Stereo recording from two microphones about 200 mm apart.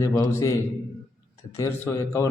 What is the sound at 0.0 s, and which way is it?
Speech, 15° left (ahead or behind).